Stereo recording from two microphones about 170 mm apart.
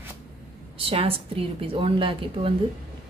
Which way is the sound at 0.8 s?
35° right (ahead or behind).